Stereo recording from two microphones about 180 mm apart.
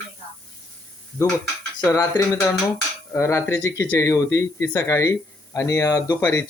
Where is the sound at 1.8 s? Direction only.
15° left (ahead or behind).